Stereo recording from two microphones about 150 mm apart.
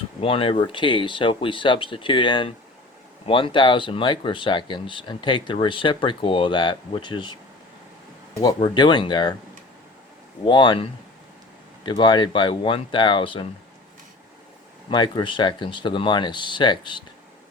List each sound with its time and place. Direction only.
0.2 s speech: 40° left (ahead or behind)
8.5 s speech: 30° left (ahead or behind)
10.4 s speech: 30° left (ahead or behind)
11.9 s speech: 30° left (ahead or behind)
14.8 s speech: 30° left (ahead or behind)